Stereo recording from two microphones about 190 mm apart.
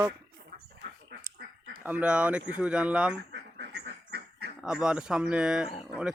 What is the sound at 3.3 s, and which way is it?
Duck, 60° right (ahead or behind).